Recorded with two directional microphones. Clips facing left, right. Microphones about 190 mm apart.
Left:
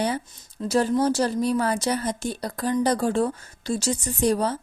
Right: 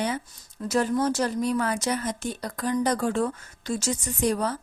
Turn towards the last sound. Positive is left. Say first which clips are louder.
# left 3 dB
turn(degrees=30)  # may be behind; listen again after turning